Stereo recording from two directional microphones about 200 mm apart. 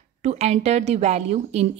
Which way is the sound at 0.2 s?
35° right (ahead or behind).